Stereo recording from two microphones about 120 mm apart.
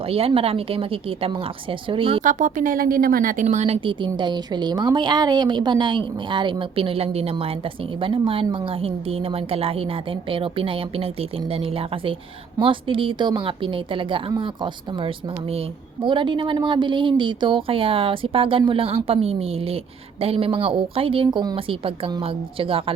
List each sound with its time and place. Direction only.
0.1 s speech: 55° right (ahead or behind)
2.2 s speech: 90° right; by 3.8 s 70° right (ahead or behind)
3.8 s a woman's voice: 40° right (ahead or behind)
16.0 s speech: 40° right (ahead or behind)